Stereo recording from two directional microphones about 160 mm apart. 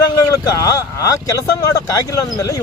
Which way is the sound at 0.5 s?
20° left (ahead or behind).